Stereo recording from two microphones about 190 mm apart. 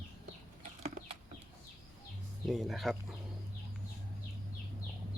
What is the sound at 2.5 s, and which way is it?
Speech, centre (ahead or behind).